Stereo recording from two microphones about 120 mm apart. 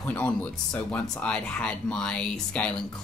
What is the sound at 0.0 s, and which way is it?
Speech, 15° left (ahead or behind).